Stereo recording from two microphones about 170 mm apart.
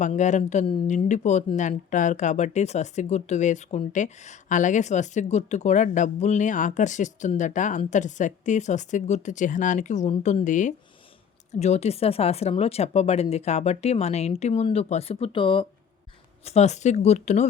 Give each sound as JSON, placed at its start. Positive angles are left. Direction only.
{"t": 0.0, "sound": "speech", "side_deg": 45}
{"t": 16.4, "sound": "speech", "side_deg": 40}